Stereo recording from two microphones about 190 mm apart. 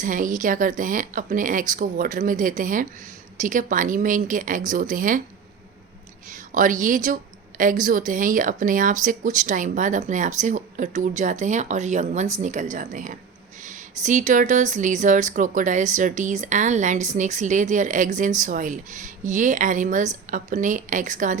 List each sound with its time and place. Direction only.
0.0 s speech: 45° right (ahead or behind)
6.3 s speech: 45° right (ahead or behind)